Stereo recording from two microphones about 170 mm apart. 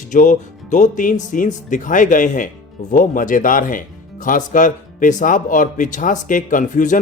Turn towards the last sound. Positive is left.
turn(degrees=45)  # may be behind; listen again after turning